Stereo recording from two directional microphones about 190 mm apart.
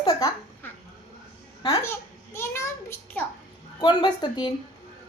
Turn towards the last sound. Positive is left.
turn(degrees=20)  # may be behind; listen again after turning